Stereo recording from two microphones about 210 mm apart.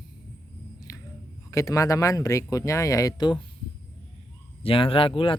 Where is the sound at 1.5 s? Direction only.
15° left (ahead or behind).